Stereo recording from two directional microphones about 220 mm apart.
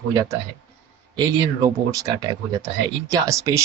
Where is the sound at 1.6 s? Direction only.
15° right (ahead or behind).